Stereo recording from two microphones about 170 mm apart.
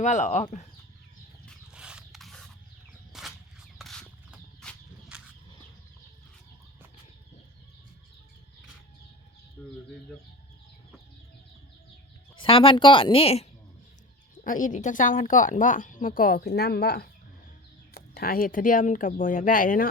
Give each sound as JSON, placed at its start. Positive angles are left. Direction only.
{"t": 0.0, "sound": "a woman's voice", "side_deg": 45}
{"t": 1.5, "sound": "a sound", "side_deg": -5}
{"t": 5.1, "sound": "a sound", "side_deg": -5}
{"t": 9.6, "sound": "speech", "side_deg": 10}
{"t": 12.4, "sound": "speech", "side_deg": 30}
{"t": 14.4, "sound": "a woman's voice", "side_deg": 50}